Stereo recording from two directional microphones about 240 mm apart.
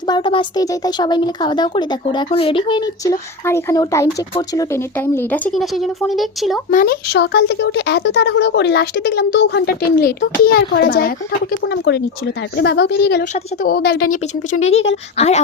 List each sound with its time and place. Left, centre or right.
0.1 s speech: left; by 6.6 s centre
6.7 s speech: left
14.1 s speech: left